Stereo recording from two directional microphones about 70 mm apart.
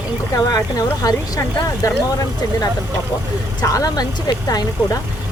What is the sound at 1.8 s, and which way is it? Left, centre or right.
Speech, left.